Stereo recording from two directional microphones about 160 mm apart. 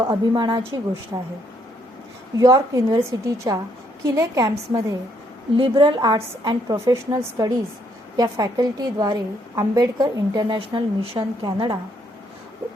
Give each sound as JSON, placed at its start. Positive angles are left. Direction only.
{"t": 0.1, "sound": "a woman's voice", "side_deg": -30}
{"t": 2.4, "sound": "a woman's voice", "side_deg": -20}